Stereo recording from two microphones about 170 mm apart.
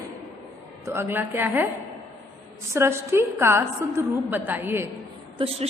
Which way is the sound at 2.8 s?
15° right (ahead or behind).